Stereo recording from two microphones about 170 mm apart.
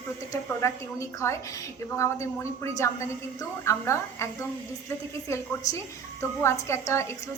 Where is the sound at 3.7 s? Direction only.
15° left (ahead or behind).